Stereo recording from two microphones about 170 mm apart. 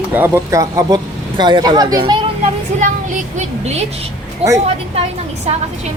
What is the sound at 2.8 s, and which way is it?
Speech, 45° right (ahead or behind).